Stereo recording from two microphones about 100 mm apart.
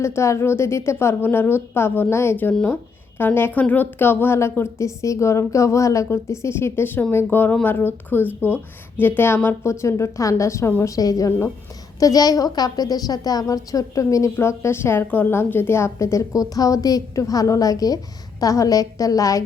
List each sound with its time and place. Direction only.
0.0 s a woman's voice: 30° left (ahead or behind)
11.9 s a woman's voice: 35° left (ahead or behind)